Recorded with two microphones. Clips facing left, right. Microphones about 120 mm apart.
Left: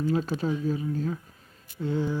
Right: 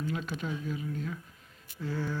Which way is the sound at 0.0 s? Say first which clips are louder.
Left 8 dB; 35° left (ahead or behind).